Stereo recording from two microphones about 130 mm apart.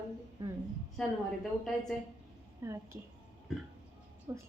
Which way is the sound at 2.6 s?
20° right (ahead or behind).